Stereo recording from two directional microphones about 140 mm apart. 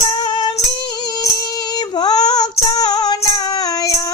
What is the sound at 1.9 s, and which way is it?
Child singing, 30° left (ahead or behind).